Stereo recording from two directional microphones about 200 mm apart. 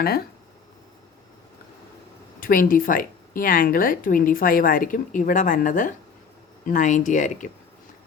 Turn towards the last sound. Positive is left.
turn(degrees=40)  # may be behind; listen again after turning